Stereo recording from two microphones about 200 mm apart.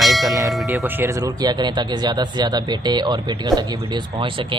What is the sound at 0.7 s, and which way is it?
Speech, 10° right (ahead or behind).